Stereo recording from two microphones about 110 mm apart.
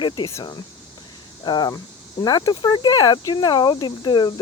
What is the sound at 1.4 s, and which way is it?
Speech, 40° left (ahead or behind).